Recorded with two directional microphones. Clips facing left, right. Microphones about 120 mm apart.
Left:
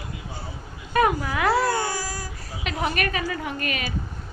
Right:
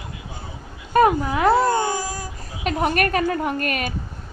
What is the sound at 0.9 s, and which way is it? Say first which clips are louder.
Baby cry: right 5 dB; 30° right (ahead or behind).